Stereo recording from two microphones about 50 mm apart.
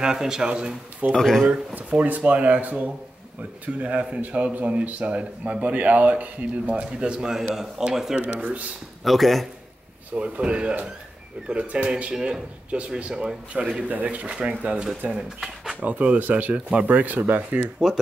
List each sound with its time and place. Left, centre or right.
0.0 s a man's voice: centre
1.1 s speech: centre
1.4 s a man's voice: centre
1.9 s speech: right; by 8.2 s centre
8.4 s speech: right
9.0 s a man's voice: centre
10.1 s a man's voice: right
15.8 s speech: right